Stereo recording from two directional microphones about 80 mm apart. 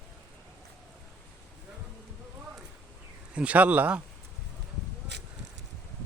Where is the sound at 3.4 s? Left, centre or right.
Centre.